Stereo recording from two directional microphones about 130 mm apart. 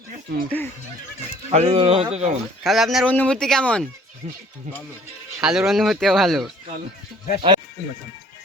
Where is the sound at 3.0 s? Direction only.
10° left (ahead or behind).